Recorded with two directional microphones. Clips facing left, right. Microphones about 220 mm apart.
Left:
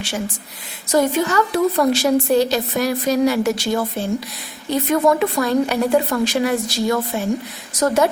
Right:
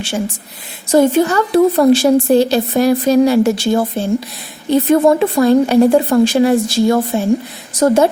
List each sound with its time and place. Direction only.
0.9 s a woman's voice: 30° right (ahead or behind)